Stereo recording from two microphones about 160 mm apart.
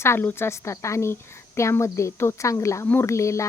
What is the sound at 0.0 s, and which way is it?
A woman's voice, 15° left (ahead or behind).